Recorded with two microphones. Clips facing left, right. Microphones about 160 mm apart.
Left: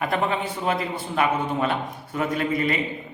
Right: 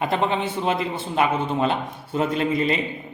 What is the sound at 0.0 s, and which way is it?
A man's voice, 25° right (ahead or behind).